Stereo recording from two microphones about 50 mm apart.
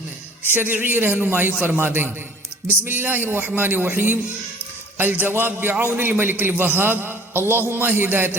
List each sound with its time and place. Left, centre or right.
0.4 s a man's voice: right